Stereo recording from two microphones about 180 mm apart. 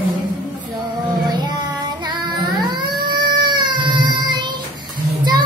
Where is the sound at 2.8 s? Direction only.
25° right (ahead or behind).